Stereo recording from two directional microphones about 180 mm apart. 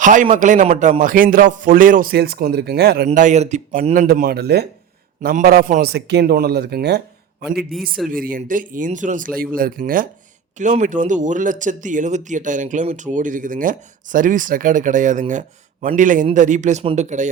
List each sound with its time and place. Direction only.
0.0 s speech: 45° right (ahead or behind); by 3.1 s 60° right (ahead or behind)
3.1 s speech: 40° right (ahead or behind); by 4.6 s 65° right (ahead or behind)
5.2 s a man's voice: 55° right (ahead or behind)
7.6 s a man's voice: centre (ahead or behind)
8.1 s speech: 50° right (ahead or behind)